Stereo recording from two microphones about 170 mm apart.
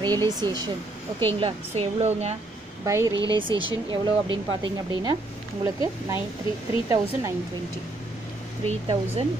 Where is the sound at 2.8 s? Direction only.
15° right (ahead or behind).